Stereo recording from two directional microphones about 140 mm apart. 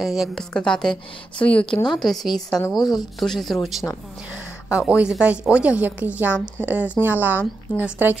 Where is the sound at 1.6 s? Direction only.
35° left (ahead or behind).